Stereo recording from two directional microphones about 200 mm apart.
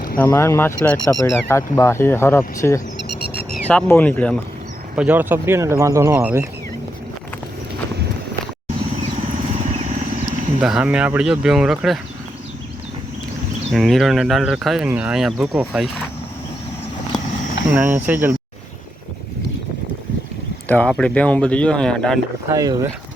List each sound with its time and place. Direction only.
0.2 s speech: 15° left (ahead or behind)
3.2 s a sound: 55° left (ahead or behind)
3.7 s speech: 10° left (ahead or behind)
4.9 s speech: 10° right (ahead or behind)
9.5 s wild animals: 35° right (ahead or behind)
10.6 s speech: 5° right (ahead or behind)
13.7 s speech: centre (ahead or behind)
17.7 s speech: 10° right (ahead or behind)
20.7 s speech: 5° left (ahead or behind)
22.4 s speech: 15° right (ahead or behind)